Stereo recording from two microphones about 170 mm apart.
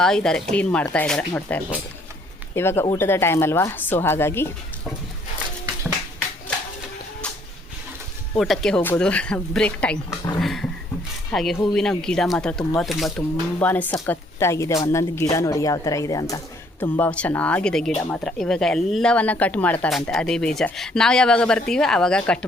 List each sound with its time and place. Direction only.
0.0 s speech: 5° left (ahead or behind)
8.4 s speech: centre (ahead or behind); by 16.4 s 20° left (ahead or behind)
16.8 s speech: 10° left (ahead or behind)